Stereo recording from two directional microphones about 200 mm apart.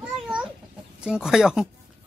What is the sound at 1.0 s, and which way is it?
Speech, 5° right (ahead or behind).